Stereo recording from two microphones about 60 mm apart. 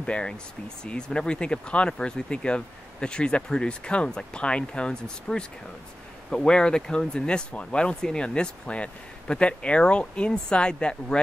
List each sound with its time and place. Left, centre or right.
0.0 s speech: centre